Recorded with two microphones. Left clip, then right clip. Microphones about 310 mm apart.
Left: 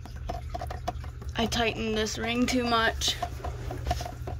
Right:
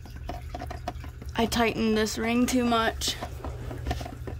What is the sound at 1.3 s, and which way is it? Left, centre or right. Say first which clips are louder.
Speech: right 2 dB; right.